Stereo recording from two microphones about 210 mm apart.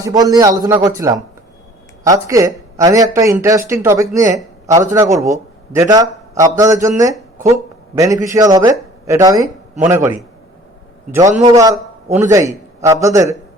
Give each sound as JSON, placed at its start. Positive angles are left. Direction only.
{"t": 0.0, "sound": "a man's voice", "side_deg": -15}